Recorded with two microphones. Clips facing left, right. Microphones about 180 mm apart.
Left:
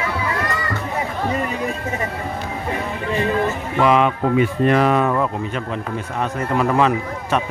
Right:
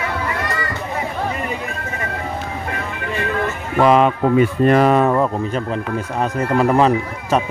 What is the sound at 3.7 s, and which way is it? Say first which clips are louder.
Speech: right 3 dB; 40° right (ahead or behind).